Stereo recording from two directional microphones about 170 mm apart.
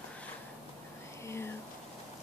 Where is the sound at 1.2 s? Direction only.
15° left (ahead or behind).